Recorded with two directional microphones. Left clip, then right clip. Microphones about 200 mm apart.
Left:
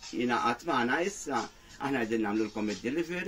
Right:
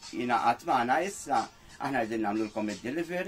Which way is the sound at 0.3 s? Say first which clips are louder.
Right 4 dB; 20° right (ahead or behind).